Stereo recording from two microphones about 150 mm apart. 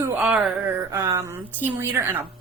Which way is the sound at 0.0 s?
10° right (ahead or behind).